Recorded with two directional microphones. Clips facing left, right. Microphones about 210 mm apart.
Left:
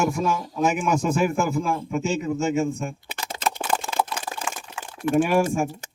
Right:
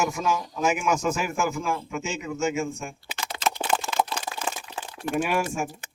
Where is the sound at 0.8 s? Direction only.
35° left (ahead or behind).